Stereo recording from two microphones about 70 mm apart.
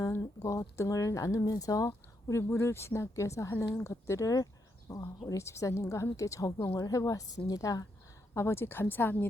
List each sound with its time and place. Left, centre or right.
0.3 s a woman's voice: left
1.9 s a woman's voice: left
8.3 s speech: left